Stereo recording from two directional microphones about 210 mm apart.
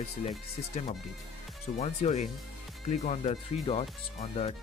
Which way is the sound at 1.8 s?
30° left (ahead or behind).